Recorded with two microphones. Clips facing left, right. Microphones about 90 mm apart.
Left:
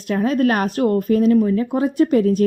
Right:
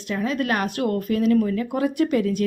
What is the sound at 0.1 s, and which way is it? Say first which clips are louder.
Speech: left 6 dB; 40° left (ahead or behind).